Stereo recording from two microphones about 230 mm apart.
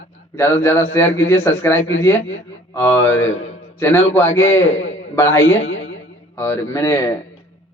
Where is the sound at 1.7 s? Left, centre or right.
Left.